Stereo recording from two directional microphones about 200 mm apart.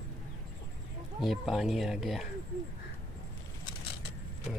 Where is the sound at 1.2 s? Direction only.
Centre (ahead or behind).